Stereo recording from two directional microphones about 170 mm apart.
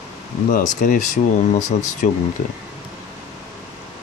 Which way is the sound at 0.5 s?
50° left (ahead or behind).